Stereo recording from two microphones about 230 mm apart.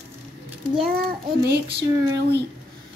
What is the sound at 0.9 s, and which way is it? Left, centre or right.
A child's voice, right.